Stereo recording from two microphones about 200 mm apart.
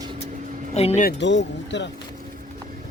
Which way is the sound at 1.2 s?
65° left (ahead or behind).